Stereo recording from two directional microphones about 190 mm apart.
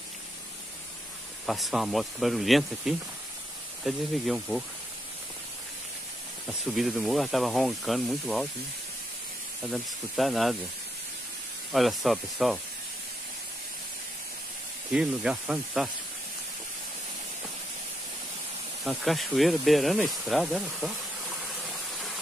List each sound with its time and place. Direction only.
1.4 s speech: centre (ahead or behind)
6.7 s speech: centre (ahead or behind)
9.7 s speech: centre (ahead or behind)
11.7 s speech: centre (ahead or behind)
14.9 s speech: 5° right (ahead or behind)
18.9 s speech: centre (ahead or behind)